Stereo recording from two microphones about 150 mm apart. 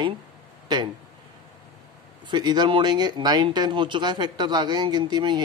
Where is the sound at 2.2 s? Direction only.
30° right (ahead or behind).